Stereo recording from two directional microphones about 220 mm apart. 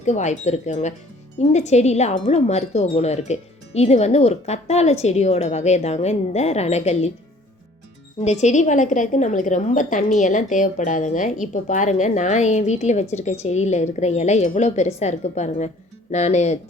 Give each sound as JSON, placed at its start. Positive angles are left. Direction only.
{"t": 0.0, "sound": "a woman's voice", "side_deg": 30}
{"t": 8.2, "sound": "a woman's voice", "side_deg": 30}